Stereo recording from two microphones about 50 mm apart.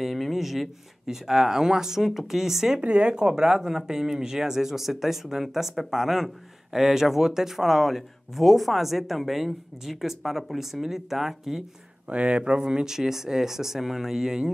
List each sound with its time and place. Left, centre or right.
0.0 s speech: centre
2.8 s speech: right; by 11.6 s centre
12.1 s speech: right